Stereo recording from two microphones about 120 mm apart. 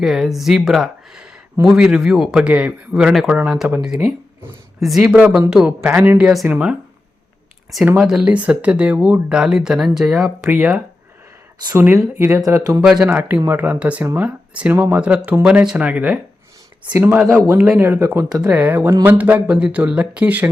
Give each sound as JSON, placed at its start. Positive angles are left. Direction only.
{"t": 0.0, "sound": "speech", "side_deg": 0}
{"t": 7.9, "sound": "speech", "side_deg": -5}
{"t": 12.8, "sound": "speech", "side_deg": -5}
{"t": 17.6, "sound": "speech", "side_deg": -10}
{"t": 17.8, "sound": "speech", "side_deg": -20}